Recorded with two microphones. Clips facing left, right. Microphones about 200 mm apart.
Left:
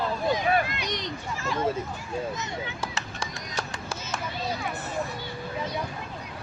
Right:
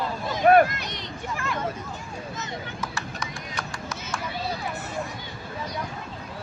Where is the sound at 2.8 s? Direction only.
30° left (ahead or behind).